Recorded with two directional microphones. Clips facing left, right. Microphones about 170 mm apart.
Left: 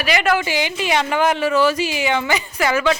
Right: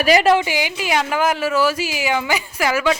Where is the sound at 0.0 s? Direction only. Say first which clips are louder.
Right 5 dB; 35° right (ahead or behind).